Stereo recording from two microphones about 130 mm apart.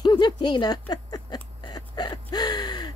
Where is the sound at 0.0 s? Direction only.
35° left (ahead or behind).